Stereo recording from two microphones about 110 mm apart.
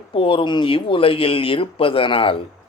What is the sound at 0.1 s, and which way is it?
Speech, 55° left (ahead or behind).